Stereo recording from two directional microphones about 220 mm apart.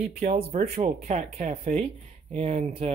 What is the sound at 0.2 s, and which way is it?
Speech, 35° right (ahead or behind).